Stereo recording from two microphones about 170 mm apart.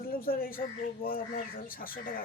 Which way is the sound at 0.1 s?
60° left (ahead or behind).